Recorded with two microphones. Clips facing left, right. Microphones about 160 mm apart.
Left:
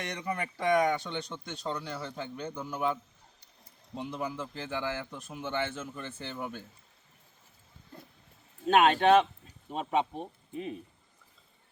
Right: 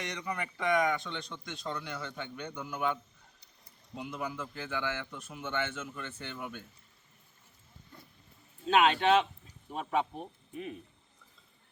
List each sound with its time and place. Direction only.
0.0 s a man's voice: 50° left (ahead or behind); by 6.7 s 35° left (ahead or behind)
8.6 s speech: 50° left (ahead or behind)
9.6 s speech: 20° left (ahead or behind)